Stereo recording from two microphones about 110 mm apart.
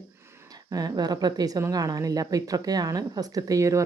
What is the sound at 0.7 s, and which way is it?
A woman's voice, 35° right (ahead or behind).